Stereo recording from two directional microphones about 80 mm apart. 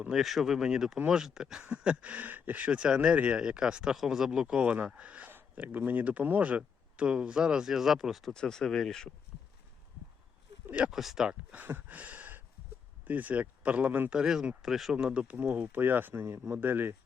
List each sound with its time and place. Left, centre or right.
0.0 s speech: centre
8.3 s speech: centre
10.8 s speech: centre
11.5 s a sound: right
13.1 s speech: centre
14.1 s speech: centre; by 16.9 s right